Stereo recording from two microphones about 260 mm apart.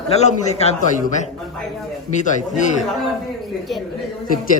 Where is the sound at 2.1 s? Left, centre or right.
Left.